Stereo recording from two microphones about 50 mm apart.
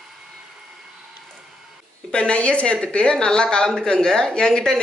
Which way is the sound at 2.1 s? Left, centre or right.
Centre.